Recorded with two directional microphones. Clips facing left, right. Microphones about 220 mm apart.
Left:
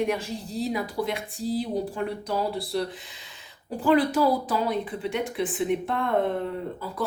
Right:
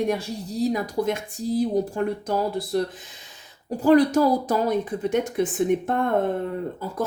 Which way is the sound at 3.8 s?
40° right (ahead or behind).